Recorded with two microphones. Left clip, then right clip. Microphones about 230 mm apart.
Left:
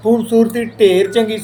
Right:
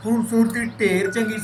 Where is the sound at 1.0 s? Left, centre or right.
Left.